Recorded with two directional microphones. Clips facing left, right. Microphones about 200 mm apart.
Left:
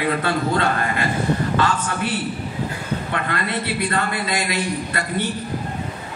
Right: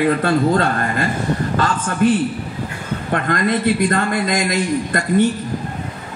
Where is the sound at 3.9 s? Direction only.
45° right (ahead or behind).